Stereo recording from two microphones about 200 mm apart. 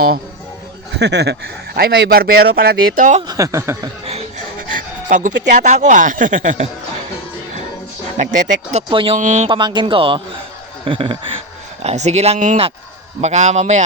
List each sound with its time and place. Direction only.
0.9 s speech: 60° right (ahead or behind)
3.2 s speech: 20° right (ahead or behind)
4.7 s speech: 40° right (ahead or behind)
8.2 s speech: 35° right (ahead or behind)
8.9 s speech: 25° right (ahead or behind)
9.1 s speech: 35° right (ahead or behind)
9.6 s speech: 25° right (ahead or behind)